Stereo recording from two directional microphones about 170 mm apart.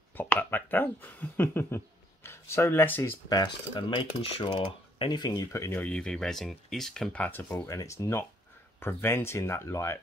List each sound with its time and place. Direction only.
0.2 s speech: 10° left (ahead or behind)
3.3 s speech: 25° left (ahead or behind)